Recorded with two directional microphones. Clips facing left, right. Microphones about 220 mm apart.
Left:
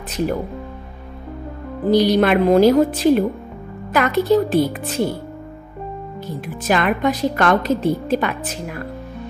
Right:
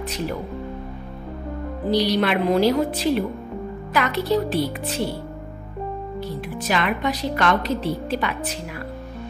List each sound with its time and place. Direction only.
1.9 s a woman's voice: 50° left (ahead or behind)
6.2 s a woman's voice: 50° left (ahead or behind)